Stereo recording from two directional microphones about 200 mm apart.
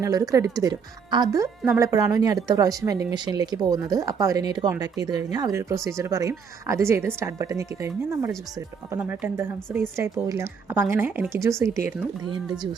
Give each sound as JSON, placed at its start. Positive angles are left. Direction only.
{"t": 0.0, "sound": "a woman's voice", "side_deg": -15}